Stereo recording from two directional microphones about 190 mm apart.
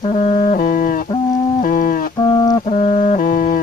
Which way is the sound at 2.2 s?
20° left (ahead or behind).